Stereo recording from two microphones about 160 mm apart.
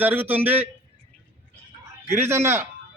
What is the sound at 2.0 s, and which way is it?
Speech, 15° right (ahead or behind).